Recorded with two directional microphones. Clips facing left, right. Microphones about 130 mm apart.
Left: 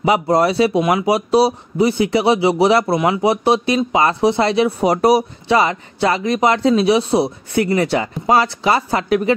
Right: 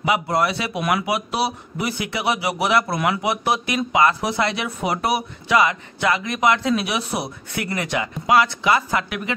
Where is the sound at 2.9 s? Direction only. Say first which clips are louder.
Left 6 dB; 20° left (ahead or behind).